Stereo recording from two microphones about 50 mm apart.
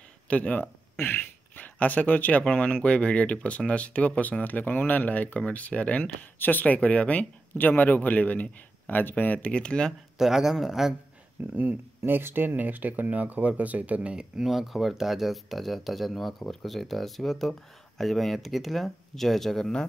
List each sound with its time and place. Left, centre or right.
0.3 s a man's voice: left
0.9 s speech: left
7.5 s a man's voice: left; by 9.9 s centre
10.1 s speech: centre
11.5 s speech: right
14.4 s speech: centre